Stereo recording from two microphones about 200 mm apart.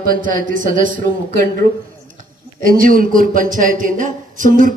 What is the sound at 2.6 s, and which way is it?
Speech, 45° right (ahead or behind).